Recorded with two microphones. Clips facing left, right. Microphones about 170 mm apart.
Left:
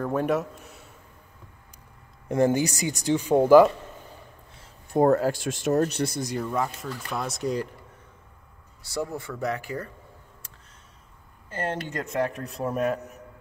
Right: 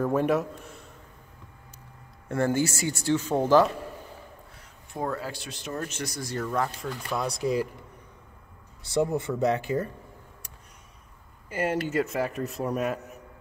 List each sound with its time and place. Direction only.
0.0 s speech: centre (ahead or behind)
2.2 s speech: 15° left (ahead or behind)
5.0 s speech: 45° left (ahead or behind)
6.2 s speech: 15° left (ahead or behind)
6.5 s speech: centre (ahead or behind)
8.8 s speech: 20° right (ahead or behind)
11.4 s speech: 10° right (ahead or behind)